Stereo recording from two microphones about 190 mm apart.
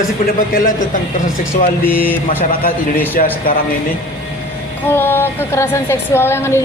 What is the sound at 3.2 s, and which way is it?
Speech, 45° left (ahead or behind).